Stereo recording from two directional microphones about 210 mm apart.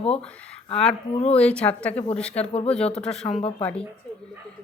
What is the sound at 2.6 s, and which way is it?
Speech, 5° left (ahead or behind).